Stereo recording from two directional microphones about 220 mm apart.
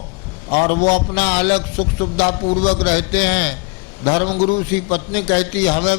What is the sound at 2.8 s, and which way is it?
Mantra, 10° left (ahead or behind).